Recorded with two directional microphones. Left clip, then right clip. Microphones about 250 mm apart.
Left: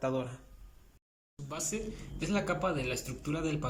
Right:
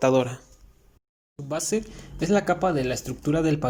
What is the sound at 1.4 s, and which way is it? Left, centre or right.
Speech, right.